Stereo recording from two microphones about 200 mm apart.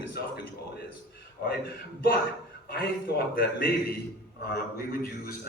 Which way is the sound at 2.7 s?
50° left (ahead or behind).